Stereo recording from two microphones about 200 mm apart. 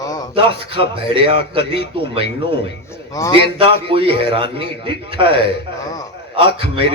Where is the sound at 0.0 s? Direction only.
20° left (ahead or behind).